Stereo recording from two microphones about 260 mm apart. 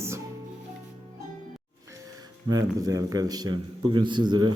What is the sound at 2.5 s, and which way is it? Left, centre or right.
A man's voice, centre.